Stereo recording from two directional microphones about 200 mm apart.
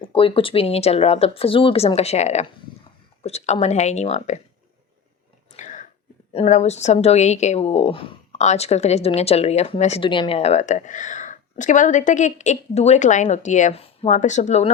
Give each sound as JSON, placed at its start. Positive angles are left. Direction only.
{"t": 0.1, "sound": "speech", "side_deg": 25}
{"t": 5.5, "sound": "whispering", "side_deg": 35}
{"t": 6.3, "sound": "speech", "side_deg": 35}